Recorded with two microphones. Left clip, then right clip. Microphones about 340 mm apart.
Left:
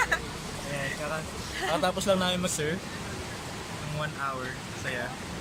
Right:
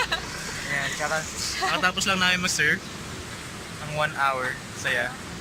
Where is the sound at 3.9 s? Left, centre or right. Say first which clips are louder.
Right 10 dB; centre.